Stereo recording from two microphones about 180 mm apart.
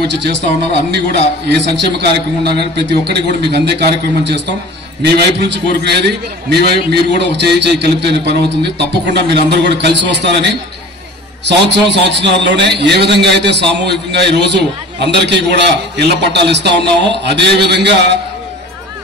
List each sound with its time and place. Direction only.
0.0 s a man's voice: 70° right (ahead or behind)
1.5 s a man's voice: 70° right (ahead or behind)